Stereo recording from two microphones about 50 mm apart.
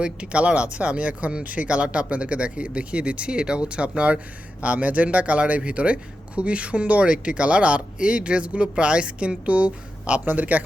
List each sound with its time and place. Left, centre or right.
0.0 s speech: right